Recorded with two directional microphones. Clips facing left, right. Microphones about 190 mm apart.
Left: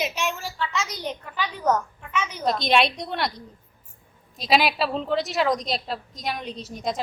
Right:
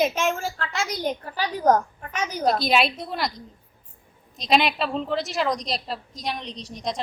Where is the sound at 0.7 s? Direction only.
35° right (ahead or behind).